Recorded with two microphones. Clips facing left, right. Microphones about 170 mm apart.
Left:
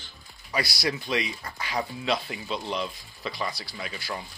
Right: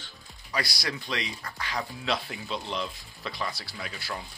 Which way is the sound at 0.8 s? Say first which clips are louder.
Left 5 dB; 15° left (ahead or behind).